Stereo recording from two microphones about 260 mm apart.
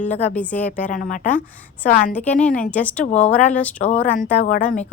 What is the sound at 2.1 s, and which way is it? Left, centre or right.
A woman's voice, centre.